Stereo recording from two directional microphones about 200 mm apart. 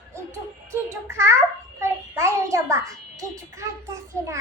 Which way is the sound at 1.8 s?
15° right (ahead or behind).